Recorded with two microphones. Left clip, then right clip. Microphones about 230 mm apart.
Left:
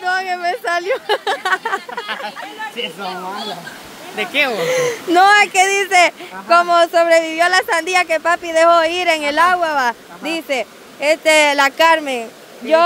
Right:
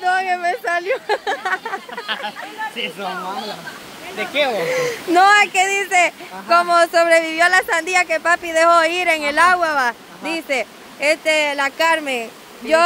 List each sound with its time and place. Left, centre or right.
0.0 s a sound: centre
4.2 s speech: left
4.6 s speech: centre
11.2 s speech: left